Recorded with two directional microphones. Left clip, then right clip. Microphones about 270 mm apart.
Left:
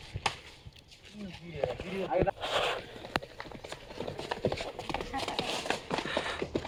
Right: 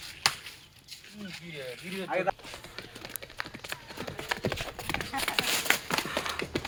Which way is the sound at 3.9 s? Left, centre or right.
Right.